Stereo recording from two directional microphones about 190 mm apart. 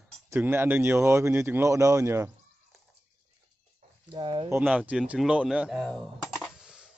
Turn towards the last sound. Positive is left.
turn(degrees=-5)  # may be behind; listen again after turning